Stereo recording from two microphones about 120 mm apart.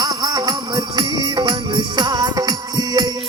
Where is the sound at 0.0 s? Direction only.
30° right (ahead or behind).